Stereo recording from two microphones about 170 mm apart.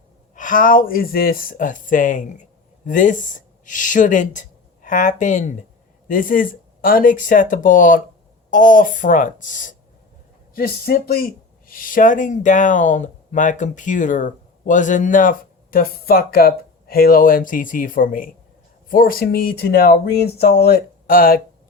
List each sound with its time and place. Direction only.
0.3 s speech: 50° left (ahead or behind)
10.5 s speech: 60° left (ahead or behind)